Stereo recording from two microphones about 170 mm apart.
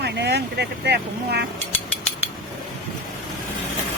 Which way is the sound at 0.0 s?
80° right.